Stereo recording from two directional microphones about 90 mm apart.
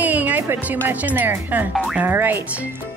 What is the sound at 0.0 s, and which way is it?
Music, 20° right (ahead or behind).